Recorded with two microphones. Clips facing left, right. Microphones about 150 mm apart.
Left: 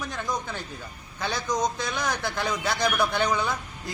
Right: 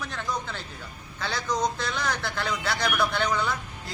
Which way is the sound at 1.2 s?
15° left (ahead or behind).